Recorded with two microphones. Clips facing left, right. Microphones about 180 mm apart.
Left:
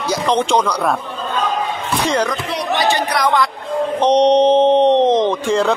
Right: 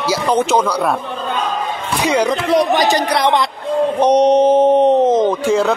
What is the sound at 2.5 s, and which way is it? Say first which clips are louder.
Speech: right 5 dB; 45° right (ahead or behind).